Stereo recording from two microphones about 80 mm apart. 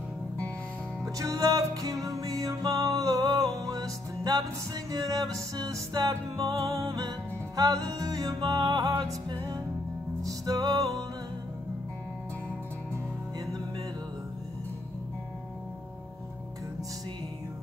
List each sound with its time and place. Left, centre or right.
1.0 s music: right